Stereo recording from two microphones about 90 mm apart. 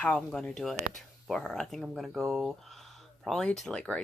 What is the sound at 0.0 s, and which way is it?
Speech, 10° left (ahead or behind).